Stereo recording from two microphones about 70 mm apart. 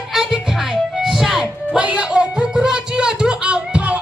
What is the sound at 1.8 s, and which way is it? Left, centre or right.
Music, centre.